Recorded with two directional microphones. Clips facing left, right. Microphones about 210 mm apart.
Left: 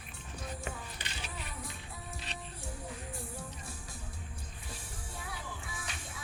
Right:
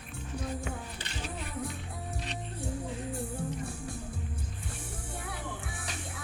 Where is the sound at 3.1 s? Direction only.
60° right (ahead or behind).